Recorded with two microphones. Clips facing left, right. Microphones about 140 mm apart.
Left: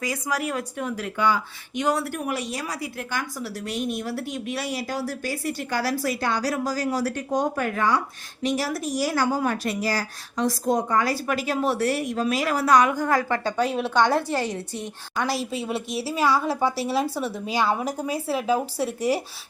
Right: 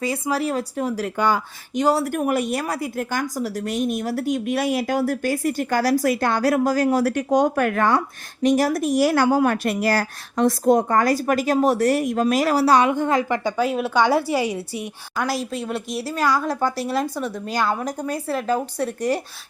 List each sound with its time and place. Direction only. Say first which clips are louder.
0.0 s a woman's voice: right 4 dB; 30° right (ahead or behind)
2.0 s speech: right 7 dB; 50° right (ahead or behind); by 13.5 s 15° right (ahead or behind)
13.6 s a woman's voice: right 1 dB; centre (ahead or behind)